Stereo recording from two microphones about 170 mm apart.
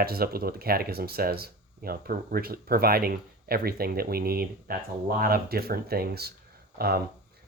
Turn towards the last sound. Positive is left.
turn(degrees=-65)  # may be behind; listen again after turning